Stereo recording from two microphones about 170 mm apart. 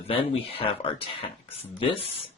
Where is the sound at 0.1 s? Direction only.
35° left (ahead or behind).